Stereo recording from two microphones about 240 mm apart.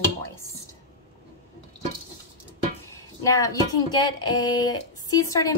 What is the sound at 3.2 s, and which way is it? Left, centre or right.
A woman's voice, centre.